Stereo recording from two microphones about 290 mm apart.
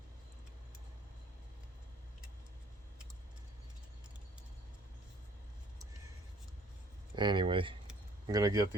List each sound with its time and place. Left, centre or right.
7.2 s speech: centre